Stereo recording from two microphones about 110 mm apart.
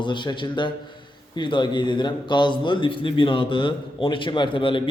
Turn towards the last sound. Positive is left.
turn(degrees=50)  # may be behind; listen again after turning